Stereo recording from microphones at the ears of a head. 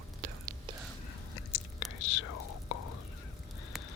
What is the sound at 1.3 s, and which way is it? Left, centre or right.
Whispering, left.